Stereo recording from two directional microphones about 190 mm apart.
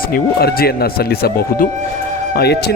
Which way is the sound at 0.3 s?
55° left (ahead or behind).